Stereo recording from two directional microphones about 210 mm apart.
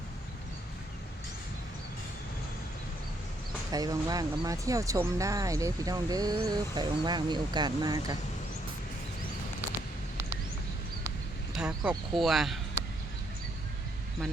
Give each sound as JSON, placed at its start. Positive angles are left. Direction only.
{"t": 3.7, "sound": "speech", "side_deg": -20}
{"t": 11.5, "sound": "speech", "side_deg": -5}